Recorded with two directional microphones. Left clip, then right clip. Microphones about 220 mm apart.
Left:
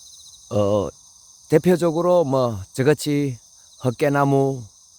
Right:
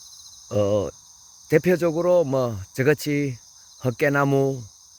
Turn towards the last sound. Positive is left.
turn(degrees=15)  # may be behind; listen again after turning